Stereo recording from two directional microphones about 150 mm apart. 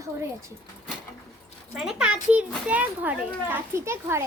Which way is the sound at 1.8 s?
5° right (ahead or behind).